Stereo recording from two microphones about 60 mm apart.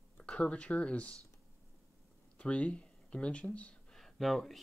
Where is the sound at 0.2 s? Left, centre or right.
Centre.